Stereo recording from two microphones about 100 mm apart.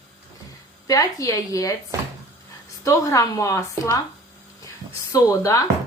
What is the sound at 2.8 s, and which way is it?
A woman's voice, 30° left (ahead or behind).